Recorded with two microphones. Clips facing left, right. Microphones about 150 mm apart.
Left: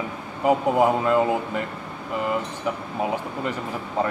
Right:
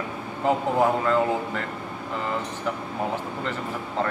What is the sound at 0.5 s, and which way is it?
Speech, 15° left (ahead or behind).